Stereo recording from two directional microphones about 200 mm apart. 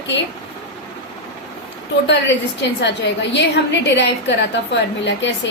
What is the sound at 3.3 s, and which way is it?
A woman's voice, 60° left (ahead or behind).